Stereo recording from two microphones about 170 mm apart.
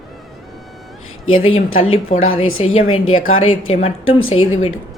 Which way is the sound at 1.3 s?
35° left (ahead or behind).